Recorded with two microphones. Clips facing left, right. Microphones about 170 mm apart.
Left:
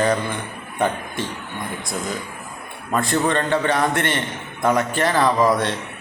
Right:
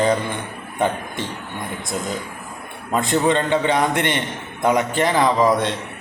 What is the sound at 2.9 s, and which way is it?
A man's voice, 20° right (ahead or behind).